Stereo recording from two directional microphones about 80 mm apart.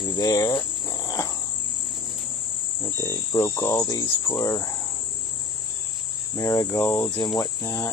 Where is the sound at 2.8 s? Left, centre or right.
Left.